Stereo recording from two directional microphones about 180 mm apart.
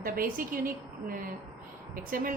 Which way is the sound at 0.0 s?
50° right (ahead or behind).